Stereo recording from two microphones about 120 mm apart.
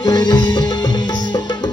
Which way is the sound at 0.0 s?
35° left (ahead or behind).